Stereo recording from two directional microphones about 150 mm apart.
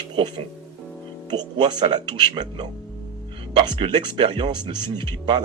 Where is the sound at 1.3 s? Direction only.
30° right (ahead or behind).